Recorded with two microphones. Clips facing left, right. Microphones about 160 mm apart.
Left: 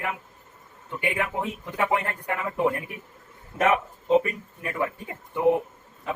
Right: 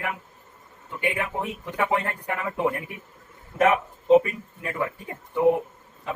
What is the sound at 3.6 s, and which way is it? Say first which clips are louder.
Speech: right 2 dB; 20° right (ahead or behind).